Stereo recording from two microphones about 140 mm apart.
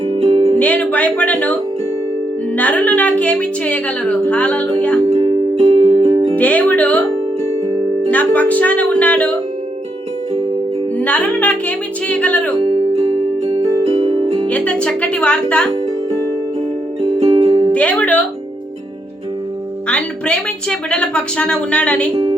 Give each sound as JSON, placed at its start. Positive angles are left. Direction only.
{"t": 0.3, "sound": "music", "side_deg": -30}
{"t": 0.6, "sound": "speech", "side_deg": 10}
{"t": 2.6, "sound": "speech", "side_deg": 10}
{"t": 5.1, "sound": "music", "side_deg": -50}
{"t": 6.3, "sound": "speech", "side_deg": 10}
{"t": 8.1, "sound": "speech", "side_deg": 10}
{"t": 11.0, "sound": "speech", "side_deg": 10}
{"t": 12.5, "sound": "music", "side_deg": -40}
{"t": 13.5, "sound": "music", "side_deg": -30}
{"t": 14.4, "sound": "speech", "side_deg": 10}
{"t": 17.4, "sound": "music", "side_deg": -30}
{"t": 17.7, "sound": "speech", "side_deg": 10}
{"t": 19.9, "sound": "speech", "side_deg": 5}
{"t": 22.1, "sound": "speech", "side_deg": -35}